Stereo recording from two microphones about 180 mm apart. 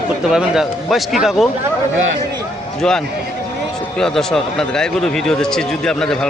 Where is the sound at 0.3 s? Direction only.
Centre (ahead or behind).